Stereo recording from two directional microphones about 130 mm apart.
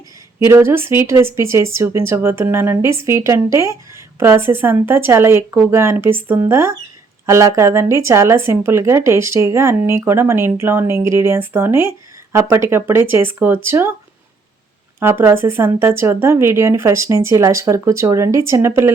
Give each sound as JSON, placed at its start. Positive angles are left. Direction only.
{"t": 0.3, "sound": "speech", "side_deg": -20}
{"t": 14.9, "sound": "speech", "side_deg": -15}